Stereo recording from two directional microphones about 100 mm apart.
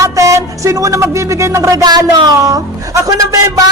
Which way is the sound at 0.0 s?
30° right (ahead or behind).